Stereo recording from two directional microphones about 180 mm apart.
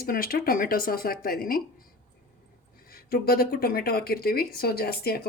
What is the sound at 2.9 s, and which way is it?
Speech, 55° left (ahead or behind).